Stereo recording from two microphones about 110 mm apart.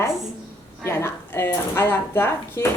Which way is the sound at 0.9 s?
25° left (ahead or behind).